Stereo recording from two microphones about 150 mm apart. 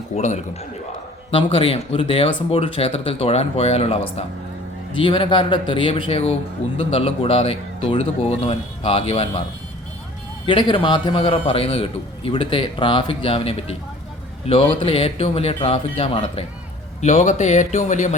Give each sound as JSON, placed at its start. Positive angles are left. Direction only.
{"t": 0.2, "sound": "speech", "side_deg": 50}
{"t": 1.3, "sound": "a man's voice", "side_deg": 35}
{"t": 4.9, "sound": "a man's voice", "side_deg": 35}
{"t": 10.4, "sound": "a man's voice", "side_deg": 35}
{"t": 17.0, "sound": "speech", "side_deg": 55}